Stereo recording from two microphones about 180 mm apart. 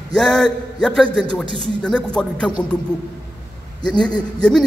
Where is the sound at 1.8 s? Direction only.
5° left (ahead or behind).